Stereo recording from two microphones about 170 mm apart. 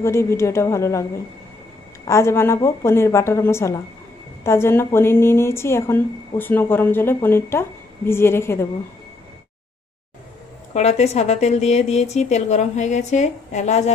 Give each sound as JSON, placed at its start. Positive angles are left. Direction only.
{"t": 0.0, "sound": "a woman's voice", "side_deg": 15}
{"t": 2.0, "sound": "a woman's voice", "side_deg": 15}
{"t": 10.7, "sound": "a woman's voice", "side_deg": 40}